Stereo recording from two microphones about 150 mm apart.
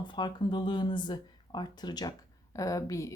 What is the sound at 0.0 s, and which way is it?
A woman's voice, 30° left (ahead or behind).